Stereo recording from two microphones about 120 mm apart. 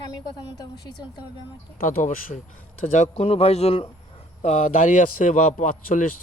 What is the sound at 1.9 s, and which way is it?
A man's voice, 90° left.